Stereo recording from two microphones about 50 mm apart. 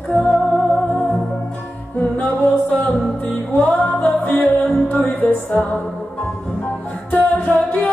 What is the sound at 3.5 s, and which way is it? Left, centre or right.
Music, left.